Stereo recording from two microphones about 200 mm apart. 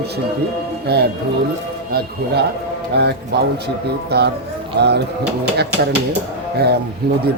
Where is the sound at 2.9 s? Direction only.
55° right (ahead or behind).